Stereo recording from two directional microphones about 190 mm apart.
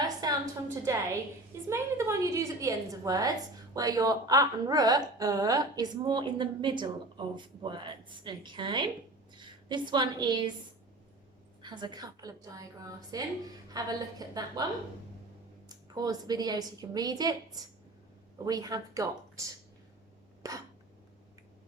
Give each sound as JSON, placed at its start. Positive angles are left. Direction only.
{"t": 0.0, "sound": "a sound", "side_deg": -20}
{"t": 0.9, "sound": "a woman's voice", "side_deg": -15}
{"t": 11.6, "sound": "a woman's voice", "side_deg": -25}
{"t": 15.7, "sound": "a woman's voice", "side_deg": -20}